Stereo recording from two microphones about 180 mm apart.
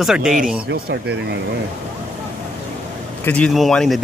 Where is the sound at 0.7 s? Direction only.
70° right (ahead or behind).